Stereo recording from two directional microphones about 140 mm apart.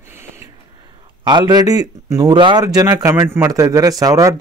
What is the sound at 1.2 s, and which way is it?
Speech, 30° right (ahead or behind).